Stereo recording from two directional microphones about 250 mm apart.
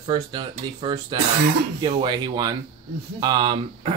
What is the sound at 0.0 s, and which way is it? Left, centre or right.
Speech, centre.